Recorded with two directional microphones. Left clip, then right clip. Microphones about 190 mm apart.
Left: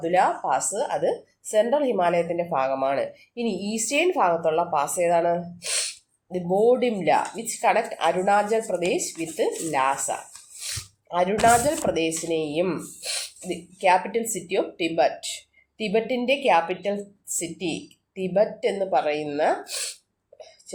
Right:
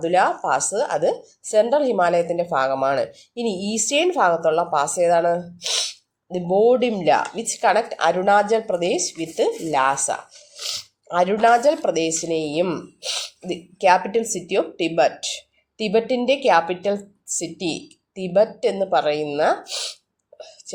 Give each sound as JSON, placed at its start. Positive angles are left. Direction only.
{"t": 0.0, "sound": "a woman's voice", "side_deg": -30}